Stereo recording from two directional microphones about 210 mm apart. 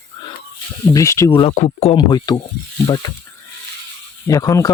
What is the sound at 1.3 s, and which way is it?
Speech, 30° left (ahead or behind).